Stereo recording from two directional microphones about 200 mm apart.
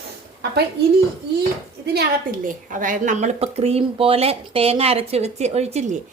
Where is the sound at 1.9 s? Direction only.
45° right (ahead or behind).